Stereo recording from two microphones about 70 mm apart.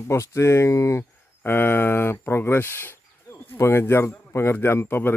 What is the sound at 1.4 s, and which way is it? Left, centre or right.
Speech, left.